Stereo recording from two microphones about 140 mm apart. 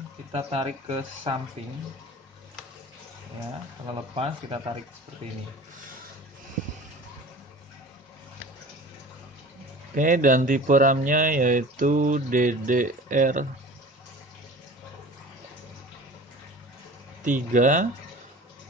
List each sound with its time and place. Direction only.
0.3 s speech: 45° right (ahead or behind)
3.8 s speech: 40° right (ahead or behind)
9.9 s speech: 70° right (ahead or behind)
17.2 s speech: 65° right (ahead or behind)